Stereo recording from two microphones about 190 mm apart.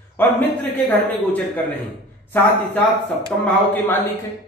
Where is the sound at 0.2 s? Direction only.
10° left (ahead or behind).